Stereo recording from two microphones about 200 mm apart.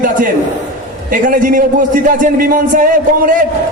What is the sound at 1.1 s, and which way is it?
A man's voice, 45° right (ahead or behind).